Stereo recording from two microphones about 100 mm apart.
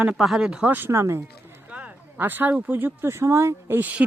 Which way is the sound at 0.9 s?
25° right (ahead or behind).